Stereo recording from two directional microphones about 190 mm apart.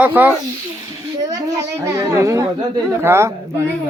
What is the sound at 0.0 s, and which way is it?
A woman's voice, 10° right (ahead or behind).